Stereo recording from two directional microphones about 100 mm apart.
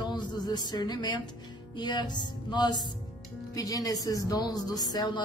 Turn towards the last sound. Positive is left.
turn(degrees=45)  # may be behind; listen again after turning